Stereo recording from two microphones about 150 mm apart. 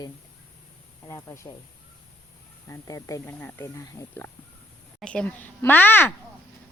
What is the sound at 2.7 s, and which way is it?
Speech, 20° left (ahead or behind).